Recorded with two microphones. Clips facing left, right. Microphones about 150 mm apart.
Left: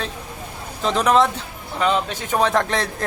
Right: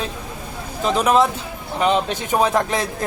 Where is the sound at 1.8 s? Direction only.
20° right (ahead or behind).